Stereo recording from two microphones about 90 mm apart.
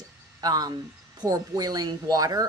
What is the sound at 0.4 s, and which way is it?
Speech, 45° right (ahead or behind).